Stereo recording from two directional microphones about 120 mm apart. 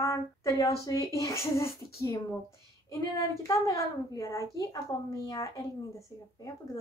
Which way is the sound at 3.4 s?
30° left (ahead or behind).